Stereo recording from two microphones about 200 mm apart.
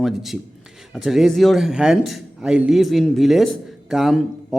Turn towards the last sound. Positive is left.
turn(degrees=0)  # may be behind; listen again after turning